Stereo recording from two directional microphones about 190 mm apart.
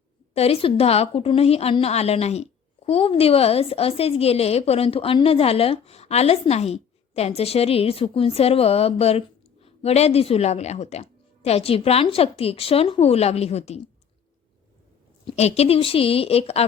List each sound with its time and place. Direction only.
0.3 s a woman's voice: 30° left (ahead or behind)
15.2 s a woman's voice: 30° left (ahead or behind)